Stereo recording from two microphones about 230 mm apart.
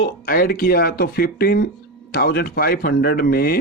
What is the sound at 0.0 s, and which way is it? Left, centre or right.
Speech, left.